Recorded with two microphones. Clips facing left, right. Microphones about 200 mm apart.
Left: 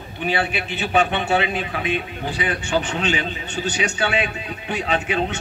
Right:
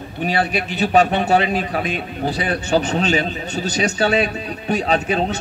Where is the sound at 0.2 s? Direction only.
40° right (ahead or behind).